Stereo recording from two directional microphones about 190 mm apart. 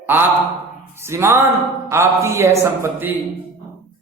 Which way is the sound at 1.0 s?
15° right (ahead or behind).